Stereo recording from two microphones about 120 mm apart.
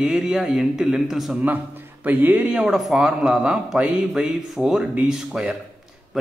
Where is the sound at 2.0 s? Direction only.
15° right (ahead or behind).